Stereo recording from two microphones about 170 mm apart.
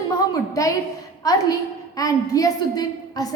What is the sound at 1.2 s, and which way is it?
A woman's voice, 20° left (ahead or behind).